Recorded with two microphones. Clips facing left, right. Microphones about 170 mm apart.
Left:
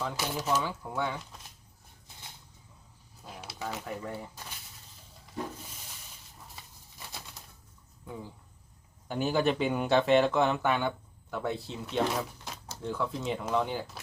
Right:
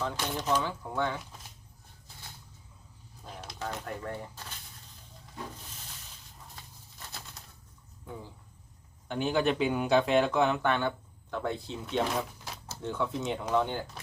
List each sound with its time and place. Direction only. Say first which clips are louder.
0.0 s speech: even; 5° left (ahead or behind)
3.2 s speech: even; 5° left (ahead or behind)
6.6 s a sound: even; 10° left (ahead or behind)
9.0 s speech: even; 5° left (ahead or behind)